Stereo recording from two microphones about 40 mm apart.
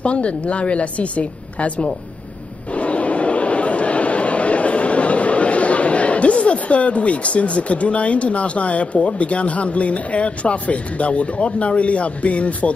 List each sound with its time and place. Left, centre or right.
0.0 s a woman's voice: left